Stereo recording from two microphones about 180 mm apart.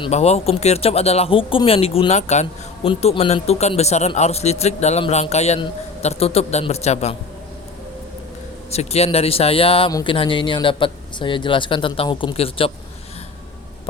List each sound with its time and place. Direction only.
0.0 s speech: 35° left (ahead or behind)
8.7 s speech: 35° left (ahead or behind)